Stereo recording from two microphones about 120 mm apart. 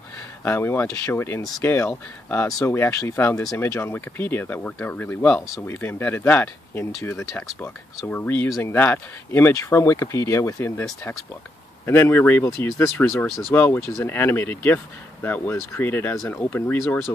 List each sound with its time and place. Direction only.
0.4 s speech: 20° left (ahead or behind)